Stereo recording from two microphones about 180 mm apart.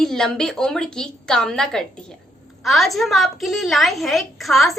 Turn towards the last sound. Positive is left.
turn(degrees=0)  # may be behind; listen again after turning